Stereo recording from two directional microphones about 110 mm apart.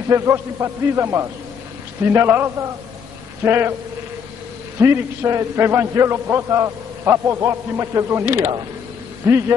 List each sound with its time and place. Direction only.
0.1 s a man's voice: 25° right (ahead or behind)
4.7 s a man's voice: 25° right (ahead or behind)